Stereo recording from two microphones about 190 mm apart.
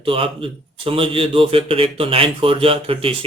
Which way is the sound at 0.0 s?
30° right (ahead or behind).